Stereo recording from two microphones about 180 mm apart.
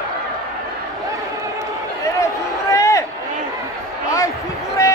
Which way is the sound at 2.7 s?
15° left (ahead or behind).